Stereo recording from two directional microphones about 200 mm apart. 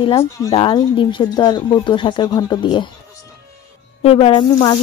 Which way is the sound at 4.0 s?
30° left (ahead or behind).